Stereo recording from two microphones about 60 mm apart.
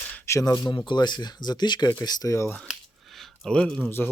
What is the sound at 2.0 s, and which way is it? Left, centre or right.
Speech, left.